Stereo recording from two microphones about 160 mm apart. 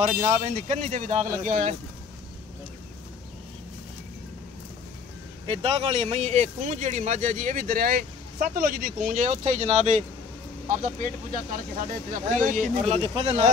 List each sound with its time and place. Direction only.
0.3 s speech: 50° right (ahead or behind)
5.5 s speech: 40° right (ahead or behind)
10.7 s speech: 55° right (ahead or behind); by 13.5 s 40° right (ahead or behind)